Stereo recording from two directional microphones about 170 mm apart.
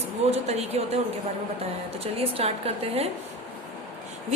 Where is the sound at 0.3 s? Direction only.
40° right (ahead or behind).